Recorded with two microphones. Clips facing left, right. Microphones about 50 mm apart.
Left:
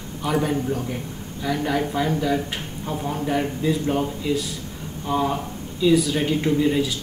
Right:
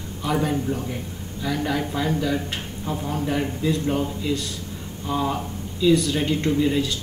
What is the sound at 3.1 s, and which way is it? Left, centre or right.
Speech, centre.